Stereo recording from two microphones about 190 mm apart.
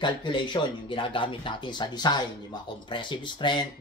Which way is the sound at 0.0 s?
25° left (ahead or behind).